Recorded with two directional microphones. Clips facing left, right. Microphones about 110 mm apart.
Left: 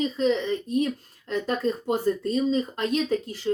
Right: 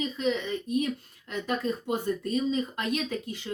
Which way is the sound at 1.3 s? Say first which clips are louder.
Left 4 dB; 35° left (ahead or behind).